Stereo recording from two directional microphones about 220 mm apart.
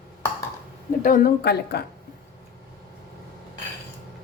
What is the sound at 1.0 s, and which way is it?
Speech, 40° left (ahead or behind).